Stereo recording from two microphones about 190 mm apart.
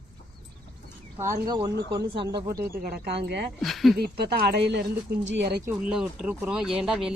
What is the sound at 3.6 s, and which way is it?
Speech, centre (ahead or behind).